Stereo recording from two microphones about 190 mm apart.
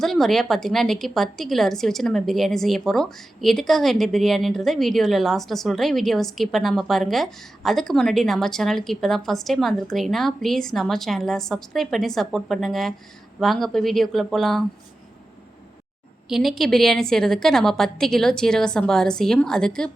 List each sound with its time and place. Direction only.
0.0 s a woman's voice: centre (ahead or behind)
16.3 s a woman's voice: centre (ahead or behind)